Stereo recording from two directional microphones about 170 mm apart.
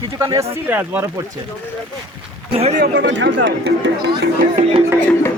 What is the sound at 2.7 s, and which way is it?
Speech, 60° right (ahead or behind).